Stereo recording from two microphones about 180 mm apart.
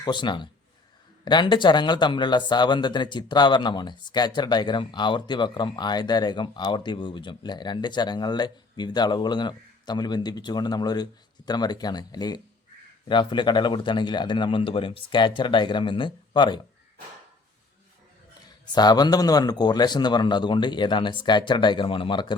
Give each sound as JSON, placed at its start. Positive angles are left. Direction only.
{"t": 0.0, "sound": "speech", "side_deg": 25}
{"t": 18.7, "sound": "speech", "side_deg": 25}